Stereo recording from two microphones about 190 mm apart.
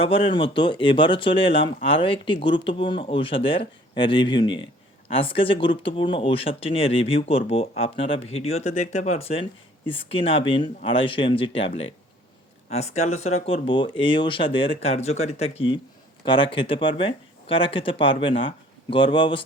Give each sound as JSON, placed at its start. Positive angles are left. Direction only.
{"t": 0.0, "sound": "speech", "side_deg": 30}